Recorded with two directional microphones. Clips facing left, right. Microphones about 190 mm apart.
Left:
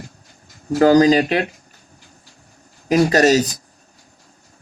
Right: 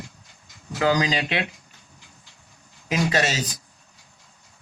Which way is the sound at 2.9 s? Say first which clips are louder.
Left 10 dB; 40° left (ahead or behind).